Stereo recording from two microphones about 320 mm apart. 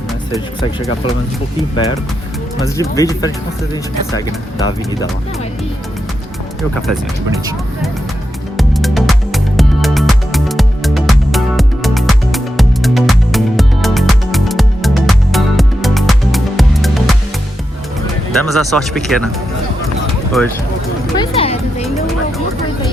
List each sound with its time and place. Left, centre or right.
1.7 s speech: centre
6.6 s speech: centre
8.5 s music: centre
18.3 s speech: centre
20.1 s run: centre
21.2 s speech: centre